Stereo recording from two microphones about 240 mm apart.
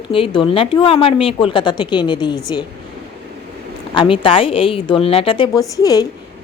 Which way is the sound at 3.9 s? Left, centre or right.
Left.